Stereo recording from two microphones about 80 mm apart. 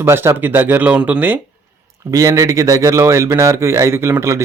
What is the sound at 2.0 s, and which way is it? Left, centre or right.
Speech, right.